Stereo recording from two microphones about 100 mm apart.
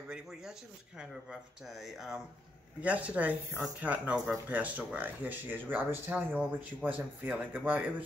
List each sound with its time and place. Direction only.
0.1 s speech: 5° right (ahead or behind)
2.8 s speech: 15° right (ahead or behind)